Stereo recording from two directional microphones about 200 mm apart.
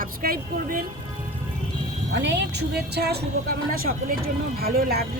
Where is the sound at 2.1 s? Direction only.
60° right (ahead or behind).